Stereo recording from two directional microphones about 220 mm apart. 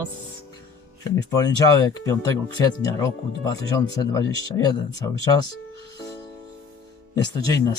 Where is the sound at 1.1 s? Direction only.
15° left (ahead or behind).